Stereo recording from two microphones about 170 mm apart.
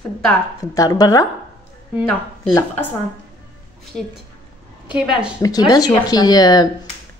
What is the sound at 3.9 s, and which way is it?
Speech, centre (ahead or behind).